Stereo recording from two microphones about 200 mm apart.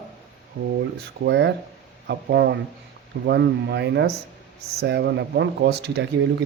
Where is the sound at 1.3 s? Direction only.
60° right (ahead or behind).